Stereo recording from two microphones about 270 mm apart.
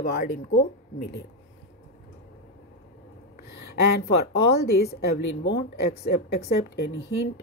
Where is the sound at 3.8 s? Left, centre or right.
Left.